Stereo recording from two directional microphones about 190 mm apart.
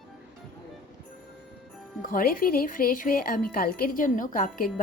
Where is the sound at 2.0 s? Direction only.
50° left (ahead or behind).